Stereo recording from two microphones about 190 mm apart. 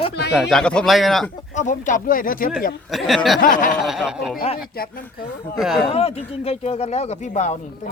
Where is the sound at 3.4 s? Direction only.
45° left (ahead or behind).